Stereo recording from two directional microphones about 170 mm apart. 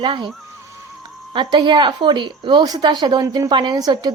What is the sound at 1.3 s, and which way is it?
A woman's voice, 25° right (ahead or behind).